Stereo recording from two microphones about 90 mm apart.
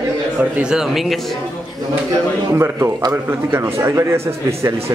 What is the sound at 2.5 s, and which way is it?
Speech, 30° right (ahead or behind).